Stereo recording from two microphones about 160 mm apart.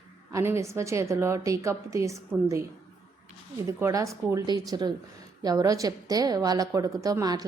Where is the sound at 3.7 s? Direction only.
20° right (ahead or behind).